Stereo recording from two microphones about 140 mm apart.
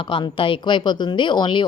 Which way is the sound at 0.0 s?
40° left (ahead or behind).